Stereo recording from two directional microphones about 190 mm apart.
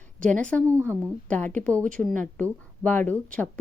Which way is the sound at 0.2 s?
45° right (ahead or behind).